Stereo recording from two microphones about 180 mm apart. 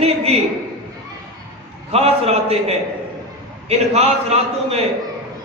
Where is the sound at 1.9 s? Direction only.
35° right (ahead or behind).